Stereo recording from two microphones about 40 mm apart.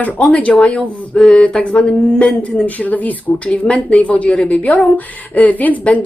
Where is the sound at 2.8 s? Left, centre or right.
Left.